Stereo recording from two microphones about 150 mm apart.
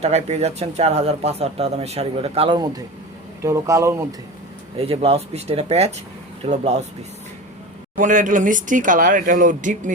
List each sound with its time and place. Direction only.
0.0 s speech: 45° right (ahead or behind)
3.4 s speech: 20° right (ahead or behind)
4.8 s speech: 40° right (ahead or behind)
7.9 s speech: 60° right (ahead or behind)